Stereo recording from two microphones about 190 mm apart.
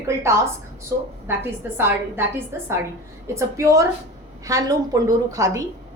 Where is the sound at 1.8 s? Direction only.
10° right (ahead or behind).